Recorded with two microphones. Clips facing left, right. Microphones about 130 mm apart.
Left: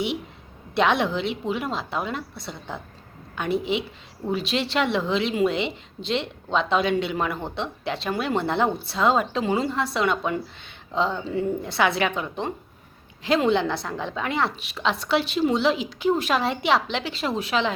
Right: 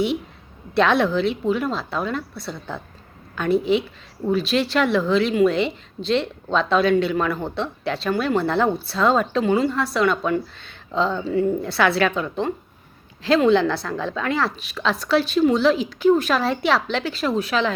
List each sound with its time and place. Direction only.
0.7 s a woman's voice: 20° left (ahead or behind)